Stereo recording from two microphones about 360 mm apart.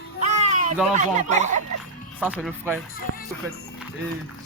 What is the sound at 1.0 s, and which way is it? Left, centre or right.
Speech, centre.